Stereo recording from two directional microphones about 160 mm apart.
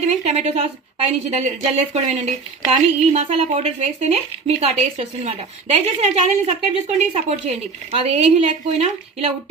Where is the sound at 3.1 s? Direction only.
40° right (ahead or behind).